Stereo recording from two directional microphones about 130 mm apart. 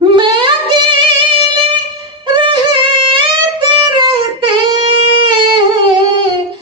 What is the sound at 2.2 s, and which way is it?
Music, 40° right (ahead or behind).